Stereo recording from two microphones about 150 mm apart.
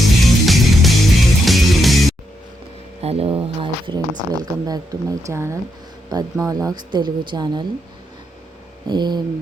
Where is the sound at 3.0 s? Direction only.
40° right (ahead or behind).